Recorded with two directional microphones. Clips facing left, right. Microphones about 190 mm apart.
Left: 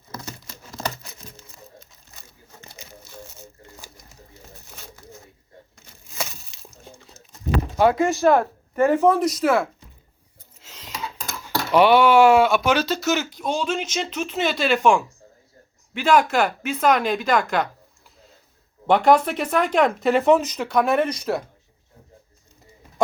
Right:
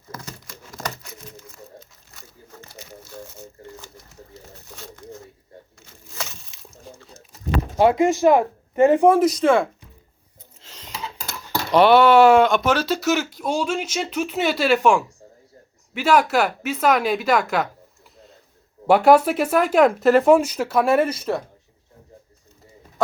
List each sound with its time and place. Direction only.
0.1 s crumpling: 25° left (ahead or behind)
6.5 s a sound: centre (ahead or behind)
7.8 s speech: 20° right (ahead or behind)
9.1 s speech: centre (ahead or behind)
10.6 s a sound: 5° left (ahead or behind)
12.7 s speech: 5° right (ahead or behind)
18.9 s speech: 5° right (ahead or behind)